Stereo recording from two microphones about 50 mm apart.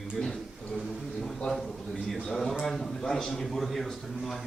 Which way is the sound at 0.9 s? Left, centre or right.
Centre.